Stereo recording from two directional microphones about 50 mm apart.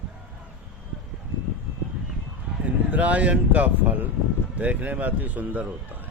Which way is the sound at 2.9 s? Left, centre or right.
Right.